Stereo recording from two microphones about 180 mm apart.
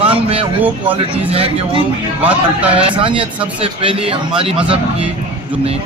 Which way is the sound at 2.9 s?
30° right (ahead or behind).